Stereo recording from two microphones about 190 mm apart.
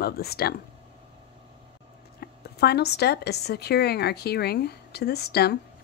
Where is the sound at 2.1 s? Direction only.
55° left (ahead or behind).